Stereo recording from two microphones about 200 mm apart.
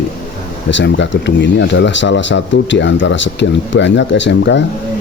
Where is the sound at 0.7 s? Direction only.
65° left (ahead or behind).